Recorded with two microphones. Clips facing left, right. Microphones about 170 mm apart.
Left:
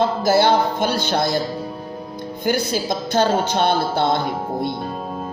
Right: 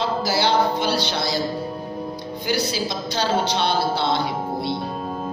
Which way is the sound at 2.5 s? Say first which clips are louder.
Left 3 dB; 50° left (ahead or behind).